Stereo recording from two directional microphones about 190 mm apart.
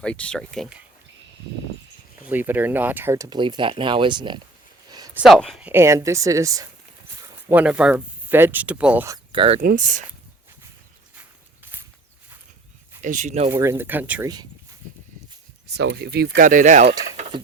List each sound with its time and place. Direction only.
0.0 s speech: 5° left (ahead or behind)
2.2 s speech: 10° right (ahead or behind)
4.9 s a sound: 20° right (ahead or behind)
5.1 s speech: centre (ahead or behind); by 6.7 s 15° right (ahead or behind)
7.5 s speech: 5° right (ahead or behind)
9.1 s speech: 25° right (ahead or behind)
9.6 s speech: 45° right (ahead or behind)
11.6 s a sound: 10° right (ahead or behind)
13.0 s speech: 40° right (ahead or behind)
13.5 s speech: 15° right (ahead or behind)
15.6 s speech: 60° right (ahead or behind); by 16.9 s 40° right (ahead or behind)